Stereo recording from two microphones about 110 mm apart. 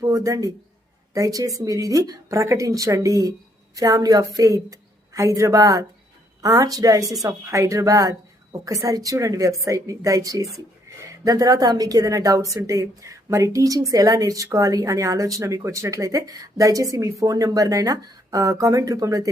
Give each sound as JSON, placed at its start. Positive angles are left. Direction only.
{"t": 0.0, "sound": "a man's voice", "side_deg": -30}